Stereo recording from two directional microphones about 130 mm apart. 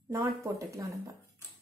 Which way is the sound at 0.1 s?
25° right (ahead or behind).